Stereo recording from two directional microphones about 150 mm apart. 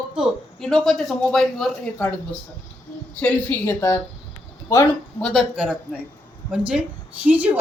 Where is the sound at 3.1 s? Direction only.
10° left (ahead or behind).